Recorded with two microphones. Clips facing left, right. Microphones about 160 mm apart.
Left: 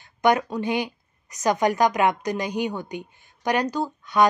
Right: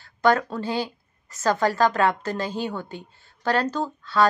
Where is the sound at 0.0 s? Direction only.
20° left (ahead or behind).